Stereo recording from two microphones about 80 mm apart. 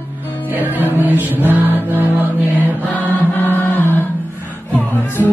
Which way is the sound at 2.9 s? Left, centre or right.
Left.